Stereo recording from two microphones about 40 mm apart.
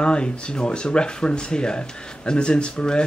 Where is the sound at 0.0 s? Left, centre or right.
Left.